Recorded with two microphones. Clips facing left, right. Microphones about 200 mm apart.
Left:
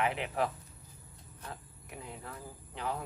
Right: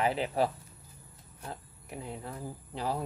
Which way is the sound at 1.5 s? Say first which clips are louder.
Right 4 dB; 30° right (ahead or behind).